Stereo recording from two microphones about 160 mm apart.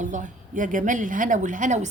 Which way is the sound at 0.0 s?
50° right (ahead or behind).